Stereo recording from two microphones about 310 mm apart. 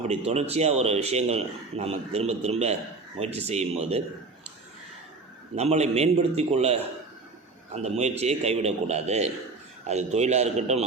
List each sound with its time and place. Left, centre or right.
0.1 s speech: right
5.5 s speech: right